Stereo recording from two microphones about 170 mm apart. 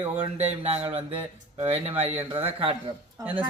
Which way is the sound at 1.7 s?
35° right (ahead or behind).